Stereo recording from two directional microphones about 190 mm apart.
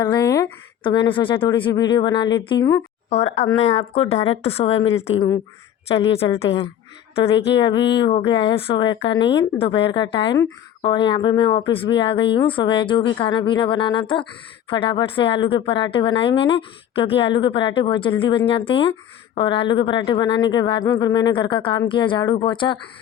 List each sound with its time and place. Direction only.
0.0 s speech: 20° left (ahead or behind)
6.1 s speech: 30° left (ahead or behind)
7.3 s a sound: 70° left (ahead or behind)
7.9 s a woman's voice: 30° left (ahead or behind)